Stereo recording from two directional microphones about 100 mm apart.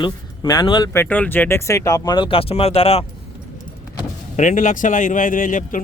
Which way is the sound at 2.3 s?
70° left (ahead or behind).